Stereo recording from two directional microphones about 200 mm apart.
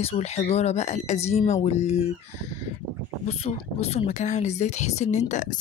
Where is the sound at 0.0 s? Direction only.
35° left (ahead or behind).